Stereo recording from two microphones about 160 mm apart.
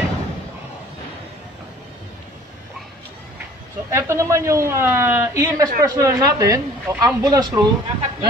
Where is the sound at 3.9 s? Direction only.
20° right (ahead or behind).